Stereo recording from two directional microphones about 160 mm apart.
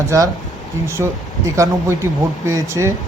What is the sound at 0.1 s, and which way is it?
Speech, 20° right (ahead or behind).